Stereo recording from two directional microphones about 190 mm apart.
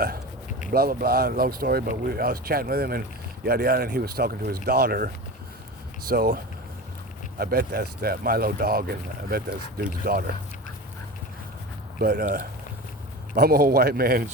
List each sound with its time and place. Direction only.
0.7 s speech: 50° right (ahead or behind)
11.9 s speech: 50° right (ahead or behind)